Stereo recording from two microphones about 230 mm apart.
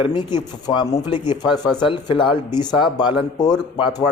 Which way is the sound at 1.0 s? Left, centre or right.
Centre.